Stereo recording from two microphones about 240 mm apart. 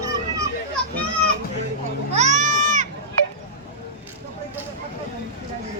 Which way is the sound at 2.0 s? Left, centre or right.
Right.